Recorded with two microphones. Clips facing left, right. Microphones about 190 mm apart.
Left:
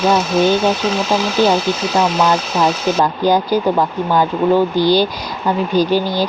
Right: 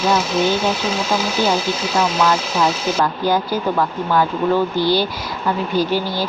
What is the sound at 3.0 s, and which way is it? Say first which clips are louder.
Speech: left 3 dB; 15° left (ahead or behind).